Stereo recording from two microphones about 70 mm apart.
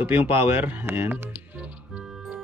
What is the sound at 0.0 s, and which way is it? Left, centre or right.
Speech, right.